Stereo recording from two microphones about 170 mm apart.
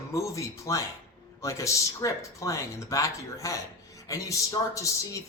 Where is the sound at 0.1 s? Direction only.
20° left (ahead or behind).